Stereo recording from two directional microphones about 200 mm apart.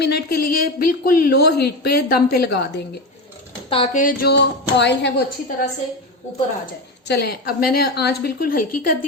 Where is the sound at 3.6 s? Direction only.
30° left (ahead or behind); by 5.3 s 60° left (ahead or behind).